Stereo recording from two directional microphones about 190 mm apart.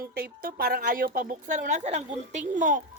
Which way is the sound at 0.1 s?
55° right (ahead or behind).